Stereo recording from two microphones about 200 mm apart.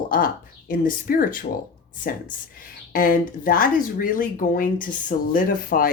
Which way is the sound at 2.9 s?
45° left (ahead or behind).